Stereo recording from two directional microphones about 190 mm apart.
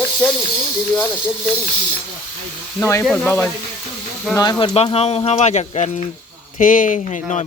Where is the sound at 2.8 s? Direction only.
15° left (ahead or behind).